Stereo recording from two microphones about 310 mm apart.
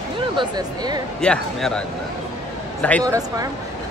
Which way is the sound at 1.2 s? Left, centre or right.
Centre.